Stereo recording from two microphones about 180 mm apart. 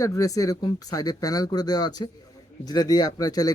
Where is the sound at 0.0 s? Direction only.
20° left (ahead or behind).